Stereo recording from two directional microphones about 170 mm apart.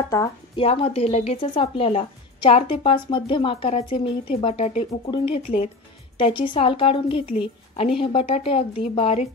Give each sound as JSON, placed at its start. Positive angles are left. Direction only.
{"t": 0.6, "sound": "speech", "side_deg": 35}